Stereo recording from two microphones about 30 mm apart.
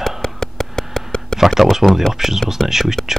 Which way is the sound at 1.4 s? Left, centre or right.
Centre.